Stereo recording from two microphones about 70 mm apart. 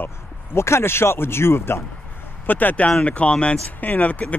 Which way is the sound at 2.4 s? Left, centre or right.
Left.